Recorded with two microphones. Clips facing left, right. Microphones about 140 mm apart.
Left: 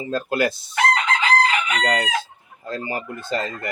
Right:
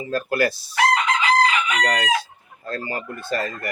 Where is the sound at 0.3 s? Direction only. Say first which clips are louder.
Even; 20° left (ahead or behind).